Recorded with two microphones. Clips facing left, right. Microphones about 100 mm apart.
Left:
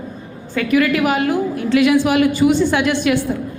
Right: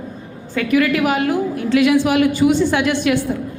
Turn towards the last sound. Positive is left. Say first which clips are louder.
# even
turn(degrees=20)  # may be behind; listen again after turning